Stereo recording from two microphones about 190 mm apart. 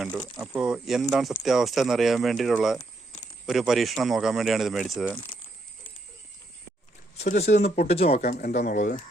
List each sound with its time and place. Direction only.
0.3 s speech: 5° right (ahead or behind)
7.2 s speech: 35° left (ahead or behind)
8.3 s speech: 45° left (ahead or behind)